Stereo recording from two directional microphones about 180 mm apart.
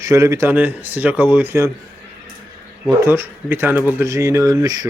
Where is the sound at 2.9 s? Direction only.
15° right (ahead or behind).